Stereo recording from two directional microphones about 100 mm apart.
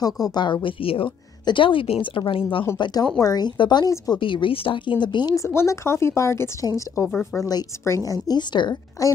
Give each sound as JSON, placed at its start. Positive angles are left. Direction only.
{"t": 0.0, "sound": "a woman's voice", "side_deg": 40}
{"t": 1.4, "sound": "a woman's voice", "side_deg": 55}
{"t": 2.8, "sound": "a woman's voice", "side_deg": 40}
{"t": 4.2, "sound": "a woman's voice", "side_deg": 60}
{"t": 5.3, "sound": "a woman's voice", "side_deg": 30}
{"t": 9.0, "sound": "a woman's voice", "side_deg": 35}